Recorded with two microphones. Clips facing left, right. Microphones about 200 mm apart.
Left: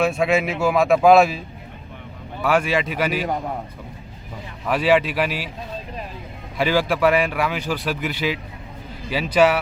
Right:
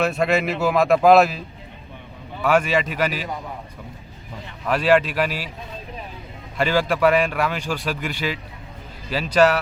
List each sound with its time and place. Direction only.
0.0 s speech: centre (ahead or behind)
2.4 s speech: 5° left (ahead or behind)
3.1 s a man's voice: 50° left (ahead or behind)
4.6 s a man's voice: 5° left (ahead or behind)
6.6 s a man's voice: 10° left (ahead or behind)